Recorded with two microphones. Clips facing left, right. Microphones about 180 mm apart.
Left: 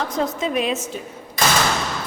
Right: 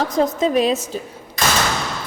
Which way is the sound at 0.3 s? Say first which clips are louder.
Right 5 dB; 35° right (ahead or behind).